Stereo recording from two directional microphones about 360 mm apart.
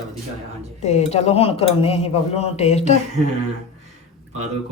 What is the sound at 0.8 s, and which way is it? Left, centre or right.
Speech, centre.